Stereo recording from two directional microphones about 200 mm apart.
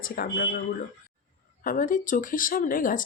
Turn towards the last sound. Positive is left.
turn(degrees=45)  # may be behind; listen again after turning